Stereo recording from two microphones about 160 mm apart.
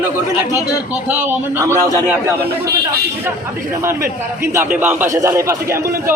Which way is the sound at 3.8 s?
15° right (ahead or behind).